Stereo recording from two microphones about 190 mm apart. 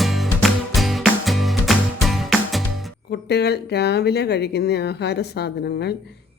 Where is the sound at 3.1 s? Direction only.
60° left (ahead or behind).